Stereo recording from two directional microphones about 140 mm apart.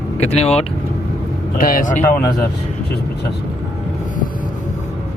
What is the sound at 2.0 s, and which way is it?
Speech, 15° left (ahead or behind).